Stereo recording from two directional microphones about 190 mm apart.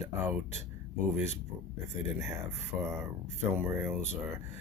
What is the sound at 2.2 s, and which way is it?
Speech, 15° right (ahead or behind).